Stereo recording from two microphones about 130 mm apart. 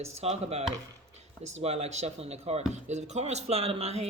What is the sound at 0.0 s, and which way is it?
Speech, 55° right (ahead or behind).